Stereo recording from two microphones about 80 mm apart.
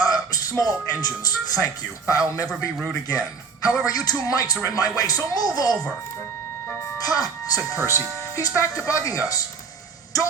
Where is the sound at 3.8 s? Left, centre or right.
Left.